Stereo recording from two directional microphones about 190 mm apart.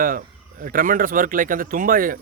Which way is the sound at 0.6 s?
45° right (ahead or behind).